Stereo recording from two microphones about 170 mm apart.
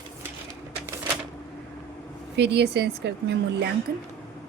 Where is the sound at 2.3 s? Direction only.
80° right.